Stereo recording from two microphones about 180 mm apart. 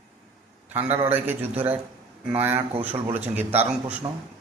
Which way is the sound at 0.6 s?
10° right (ahead or behind).